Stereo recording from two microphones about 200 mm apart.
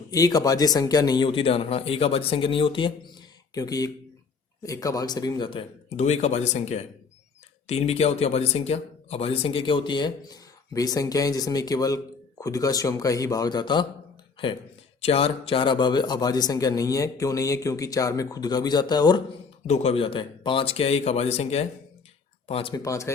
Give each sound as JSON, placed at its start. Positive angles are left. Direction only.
{"t": 0.1, "sound": "a man's voice", "side_deg": 20}
{"t": 15.0, "sound": "speech", "side_deg": 30}
{"t": 19.6, "sound": "speech", "side_deg": 35}
{"t": 22.7, "sound": "a man's voice", "side_deg": 15}